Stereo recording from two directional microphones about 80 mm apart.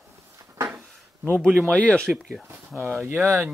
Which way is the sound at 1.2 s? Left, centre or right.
Right.